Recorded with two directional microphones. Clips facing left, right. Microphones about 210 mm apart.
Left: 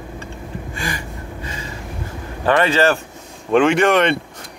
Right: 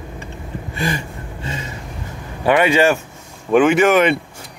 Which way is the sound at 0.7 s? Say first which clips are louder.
Right 7 dB; 25° right (ahead or behind).